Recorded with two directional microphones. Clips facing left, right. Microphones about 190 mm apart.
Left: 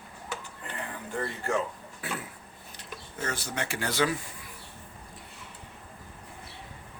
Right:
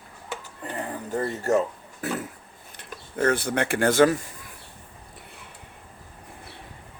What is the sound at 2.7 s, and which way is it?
Speech, 55° right (ahead or behind).